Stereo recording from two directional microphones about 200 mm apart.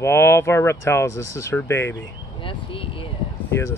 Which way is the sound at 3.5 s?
15° left (ahead or behind).